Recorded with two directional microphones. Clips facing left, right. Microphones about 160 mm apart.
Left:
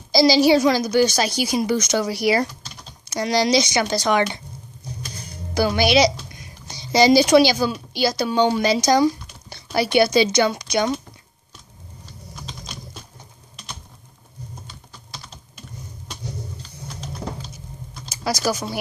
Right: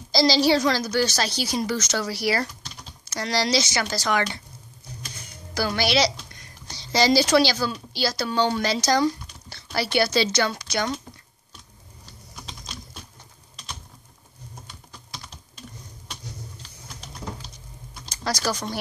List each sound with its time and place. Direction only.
0.1 s a woman's voice: 10° left (ahead or behind)
5.5 s a woman's voice: 15° left (ahead or behind)
18.0 s speech: 10° left (ahead or behind)